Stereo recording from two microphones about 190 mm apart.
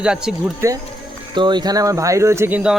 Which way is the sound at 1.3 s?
25° right (ahead or behind).